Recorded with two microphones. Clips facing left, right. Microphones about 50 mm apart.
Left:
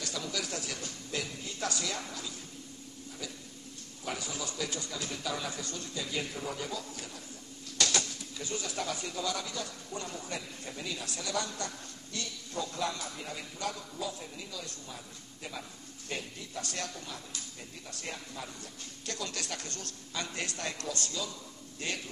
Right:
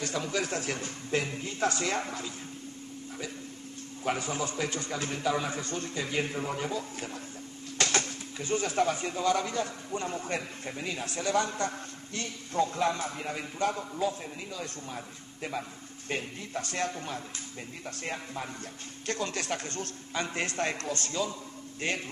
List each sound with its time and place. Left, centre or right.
0.0 s speech: right
4.0 s speech: right
16.1 s speech: right